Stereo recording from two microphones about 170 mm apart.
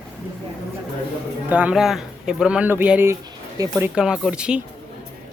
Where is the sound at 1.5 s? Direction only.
5° right (ahead or behind).